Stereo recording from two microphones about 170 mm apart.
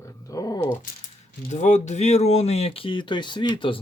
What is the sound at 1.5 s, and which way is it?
Speech, 45° left (ahead or behind).